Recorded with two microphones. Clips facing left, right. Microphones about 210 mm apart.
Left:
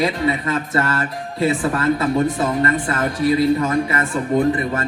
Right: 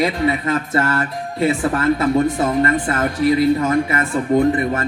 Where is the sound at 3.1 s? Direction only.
25° left (ahead or behind).